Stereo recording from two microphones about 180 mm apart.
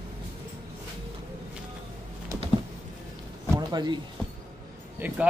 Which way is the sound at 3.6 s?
25° right (ahead or behind).